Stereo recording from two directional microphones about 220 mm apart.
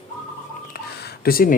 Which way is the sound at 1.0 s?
40° left (ahead or behind).